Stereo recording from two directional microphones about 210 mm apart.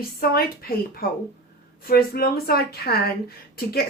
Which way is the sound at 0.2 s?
45° left (ahead or behind).